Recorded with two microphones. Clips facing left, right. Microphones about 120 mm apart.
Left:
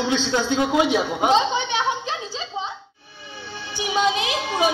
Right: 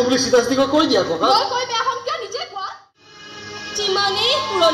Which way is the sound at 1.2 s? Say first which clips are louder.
Right 2 dB; 90° right.